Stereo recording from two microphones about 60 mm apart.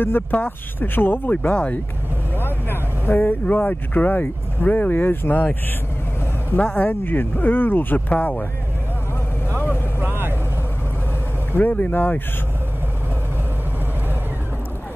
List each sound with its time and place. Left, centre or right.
0.3 s speech: left
2.3 s a sound: left
3.4 s speech: left
6.6 s speech: left
9.5 s vehicle: left
10.0 s vehicle: right
11.5 s speech: left